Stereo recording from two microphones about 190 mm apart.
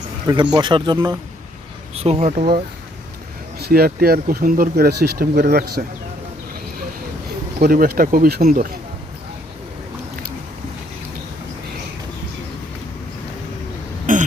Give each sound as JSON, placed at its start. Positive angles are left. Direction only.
{"t": 0.5, "sound": "speech", "side_deg": -25}
{"t": 2.0, "sound": "speech", "side_deg": -35}
{"t": 3.6, "sound": "speech", "side_deg": -50}
{"t": 7.6, "sound": "speech", "side_deg": -50}
{"t": 14.1, "sound": "throat clearing", "side_deg": -45}